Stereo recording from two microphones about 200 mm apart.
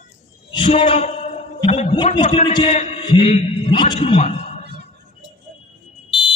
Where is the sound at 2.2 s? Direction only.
30° left (ahead or behind).